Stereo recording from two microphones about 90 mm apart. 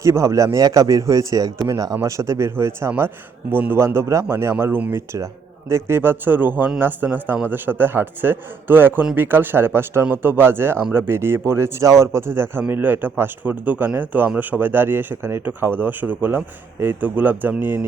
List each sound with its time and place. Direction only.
0.0 s a man's voice: 35° right (ahead or behind); by 17.8 s 20° right (ahead or behind)